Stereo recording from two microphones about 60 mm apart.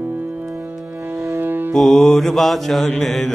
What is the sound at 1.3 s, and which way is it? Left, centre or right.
Music, right.